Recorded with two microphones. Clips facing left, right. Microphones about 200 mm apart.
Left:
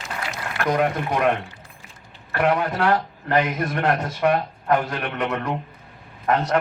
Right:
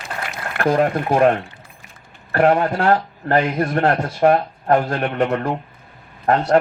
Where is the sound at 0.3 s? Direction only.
55° right (ahead or behind).